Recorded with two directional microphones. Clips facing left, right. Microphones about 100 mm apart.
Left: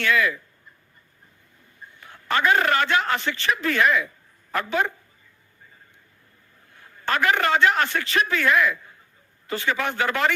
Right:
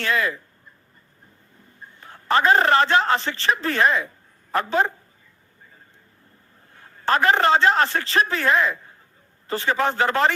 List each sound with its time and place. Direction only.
0.0 s speech: 35° right (ahead or behind)
2.0 s speech: 30° right (ahead or behind)
6.7 s speech: 35° right (ahead or behind)